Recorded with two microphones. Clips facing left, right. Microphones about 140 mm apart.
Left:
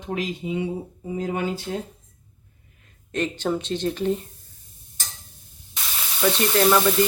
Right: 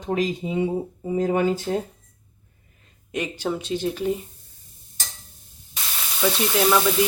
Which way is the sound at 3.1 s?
10° right (ahead or behind).